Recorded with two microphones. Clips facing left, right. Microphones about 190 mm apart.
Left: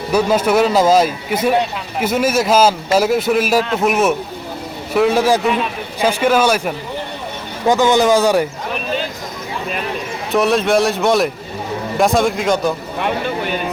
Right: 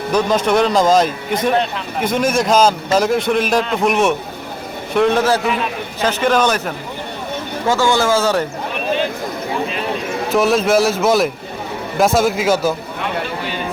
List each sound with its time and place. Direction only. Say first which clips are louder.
0.1 s a man's voice: left 1 dB; 10° left (ahead or behind)
10.3 s a man's voice: even; centre (ahead or behind)